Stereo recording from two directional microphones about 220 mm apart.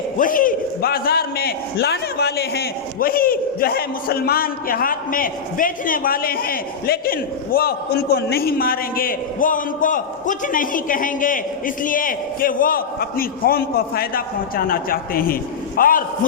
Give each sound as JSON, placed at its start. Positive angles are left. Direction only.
{"t": 0.2, "sound": "a man's voice", "side_deg": 40}